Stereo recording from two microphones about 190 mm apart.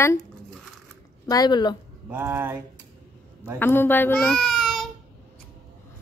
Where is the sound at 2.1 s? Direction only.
10° right (ahead or behind).